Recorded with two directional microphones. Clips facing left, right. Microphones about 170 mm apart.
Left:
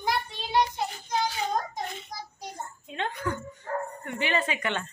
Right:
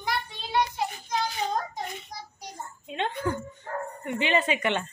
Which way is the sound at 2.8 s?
20° right (ahead or behind).